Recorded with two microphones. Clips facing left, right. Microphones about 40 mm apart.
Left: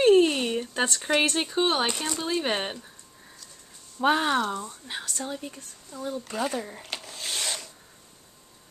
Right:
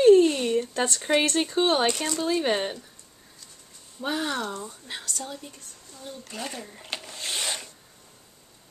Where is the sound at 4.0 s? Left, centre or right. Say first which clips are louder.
Left 6 dB; left.